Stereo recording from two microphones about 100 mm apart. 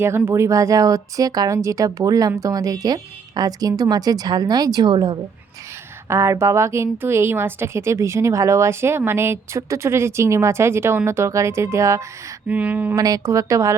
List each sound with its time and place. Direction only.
0.3 s speech: 30° right (ahead or behind); by 5.1 s 50° right (ahead or behind)
6.1 s a woman's voice: 30° right (ahead or behind)
12.5 s speech: 15° right (ahead or behind)
13.0 s speech: 35° right (ahead or behind)